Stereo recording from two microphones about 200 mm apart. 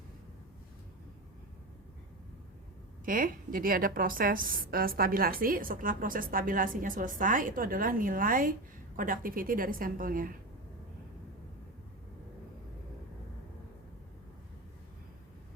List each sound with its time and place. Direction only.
3.1 s a woman's voice: 45° right (ahead or behind)